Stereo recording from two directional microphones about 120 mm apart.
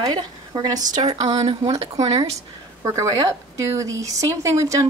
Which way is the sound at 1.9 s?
30° right (ahead or behind).